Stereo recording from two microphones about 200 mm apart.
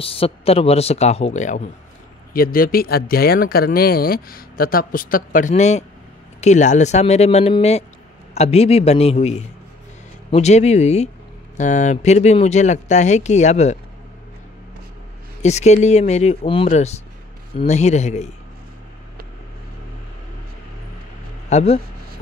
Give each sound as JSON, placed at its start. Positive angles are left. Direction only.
{"t": 0.0, "sound": "speech", "side_deg": 30}
{"t": 15.4, "sound": "speech", "side_deg": 35}
{"t": 21.5, "sound": "speech", "side_deg": 35}